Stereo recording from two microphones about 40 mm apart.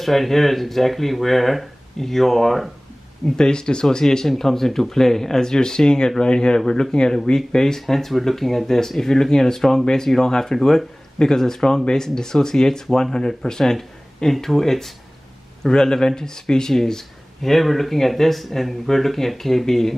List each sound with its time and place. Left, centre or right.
0.0 s speech: centre
3.3 s speech: centre
4.0 s speech: centre